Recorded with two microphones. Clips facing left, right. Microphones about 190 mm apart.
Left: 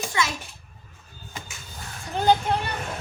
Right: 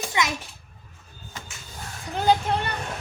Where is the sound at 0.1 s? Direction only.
20° right (ahead or behind).